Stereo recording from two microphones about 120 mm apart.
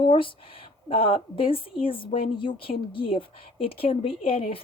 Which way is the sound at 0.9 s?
50° left (ahead or behind).